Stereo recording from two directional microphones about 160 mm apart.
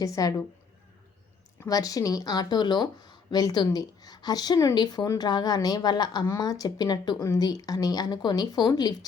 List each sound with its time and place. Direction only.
0.0 s speech: 20° left (ahead or behind)
1.6 s speech: 20° left (ahead or behind)